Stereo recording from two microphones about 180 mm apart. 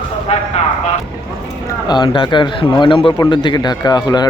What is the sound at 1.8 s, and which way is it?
A man's voice, 25° left (ahead or behind).